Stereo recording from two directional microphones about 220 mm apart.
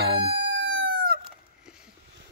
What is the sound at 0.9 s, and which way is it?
Chicken, 40° right (ahead or behind).